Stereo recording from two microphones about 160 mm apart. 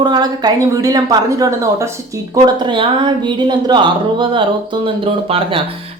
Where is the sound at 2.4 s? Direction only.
30° right (ahead or behind).